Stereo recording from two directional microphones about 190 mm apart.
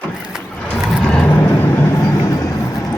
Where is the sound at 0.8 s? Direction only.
5° left (ahead or behind).